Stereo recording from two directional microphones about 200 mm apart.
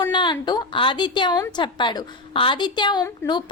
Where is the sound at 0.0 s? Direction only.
25° left (ahead or behind).